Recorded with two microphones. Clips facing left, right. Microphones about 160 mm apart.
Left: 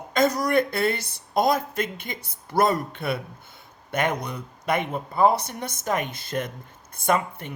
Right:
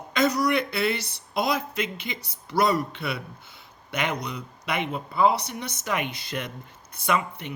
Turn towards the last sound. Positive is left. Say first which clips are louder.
# left 2 dB
turn(degrees=50)  # may be behind; listen again after turning